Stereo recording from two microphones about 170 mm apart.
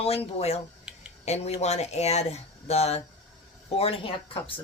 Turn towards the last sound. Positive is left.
turn(degrees=30)  # may be behind; listen again after turning